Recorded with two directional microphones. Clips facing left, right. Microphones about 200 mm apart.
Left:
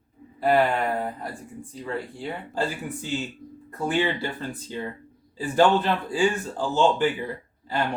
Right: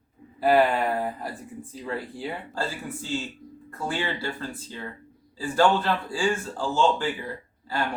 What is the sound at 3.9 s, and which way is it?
A man's voice, 20° left (ahead or behind).